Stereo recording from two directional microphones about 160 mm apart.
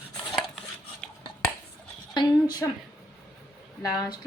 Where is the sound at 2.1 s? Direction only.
25° left (ahead or behind).